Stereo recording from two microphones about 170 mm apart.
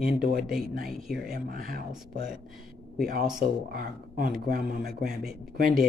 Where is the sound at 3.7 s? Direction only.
60° right (ahead or behind).